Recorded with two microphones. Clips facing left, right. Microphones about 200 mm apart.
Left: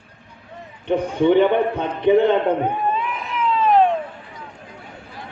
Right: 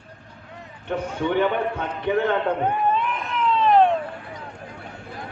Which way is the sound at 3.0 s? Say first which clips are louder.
Left 1 dB; centre (ahead or behind).